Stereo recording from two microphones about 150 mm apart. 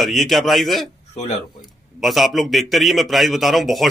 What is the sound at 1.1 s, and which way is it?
Speech, 50° left (ahead or behind).